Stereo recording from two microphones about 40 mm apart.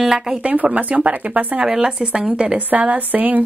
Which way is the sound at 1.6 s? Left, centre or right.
Centre.